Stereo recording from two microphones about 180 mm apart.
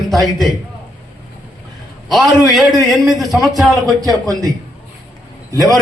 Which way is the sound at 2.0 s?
Centre (ahead or behind).